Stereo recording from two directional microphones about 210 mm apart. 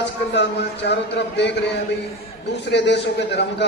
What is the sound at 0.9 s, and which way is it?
Speech, 55° left (ahead or behind).